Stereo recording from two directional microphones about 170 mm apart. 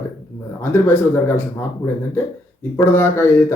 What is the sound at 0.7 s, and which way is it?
Speech, 15° left (ahead or behind).